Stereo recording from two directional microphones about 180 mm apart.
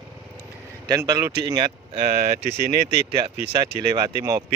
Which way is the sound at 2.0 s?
55° right (ahead or behind).